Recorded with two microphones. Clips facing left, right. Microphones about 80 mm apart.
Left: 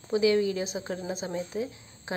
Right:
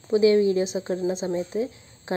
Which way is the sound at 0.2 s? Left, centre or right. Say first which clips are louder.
Right 6 dB; right.